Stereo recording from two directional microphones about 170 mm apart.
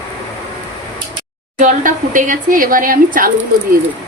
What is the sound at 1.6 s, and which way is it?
Speech, 50° right (ahead or behind).